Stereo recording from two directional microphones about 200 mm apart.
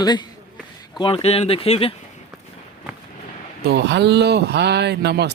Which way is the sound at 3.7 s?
60° right (ahead or behind).